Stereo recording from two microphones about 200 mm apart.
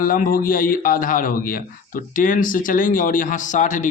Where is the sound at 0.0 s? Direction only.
45° left (ahead or behind).